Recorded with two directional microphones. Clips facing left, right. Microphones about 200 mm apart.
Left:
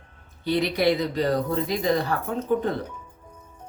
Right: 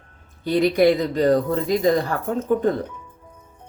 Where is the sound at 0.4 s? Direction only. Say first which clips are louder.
Right 5 dB; 50° right (ahead or behind).